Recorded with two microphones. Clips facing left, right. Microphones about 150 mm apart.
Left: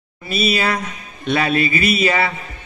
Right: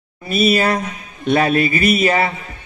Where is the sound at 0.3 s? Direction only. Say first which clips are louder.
Right 4 dB; 45° right (ahead or behind).